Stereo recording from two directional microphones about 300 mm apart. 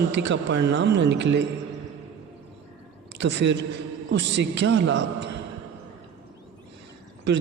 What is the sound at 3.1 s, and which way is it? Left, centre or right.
A man's voice, right.